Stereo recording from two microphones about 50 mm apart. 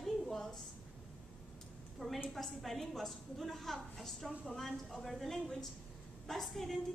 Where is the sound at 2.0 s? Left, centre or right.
Centre.